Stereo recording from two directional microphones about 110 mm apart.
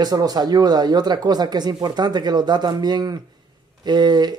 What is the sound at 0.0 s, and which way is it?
Speech, 40° right (ahead or behind).